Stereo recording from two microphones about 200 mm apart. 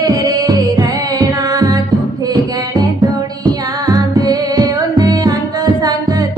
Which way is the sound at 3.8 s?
20° right (ahead or behind).